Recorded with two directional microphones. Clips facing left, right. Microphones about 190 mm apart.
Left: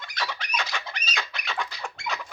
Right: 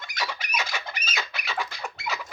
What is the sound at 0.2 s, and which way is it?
Chicken, 10° right (ahead or behind).